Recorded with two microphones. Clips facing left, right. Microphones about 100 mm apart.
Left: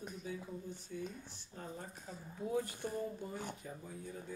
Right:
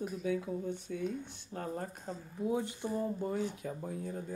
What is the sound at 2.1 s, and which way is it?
Speech, 45° right (ahead or behind).